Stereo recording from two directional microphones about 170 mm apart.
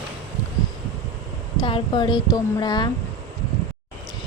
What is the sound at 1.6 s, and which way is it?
Speech, 30° left (ahead or behind).